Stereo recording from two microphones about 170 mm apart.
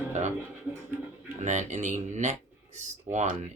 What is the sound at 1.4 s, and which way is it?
Speech, 45° right (ahead or behind).